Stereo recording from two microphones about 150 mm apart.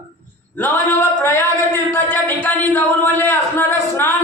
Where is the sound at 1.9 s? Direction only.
15° left (ahead or behind).